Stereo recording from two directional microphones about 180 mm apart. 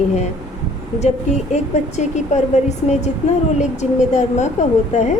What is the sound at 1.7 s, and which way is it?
A woman's voice, 40° left (ahead or behind).